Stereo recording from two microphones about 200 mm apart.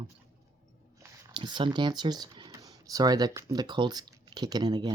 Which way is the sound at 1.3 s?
25° right (ahead or behind).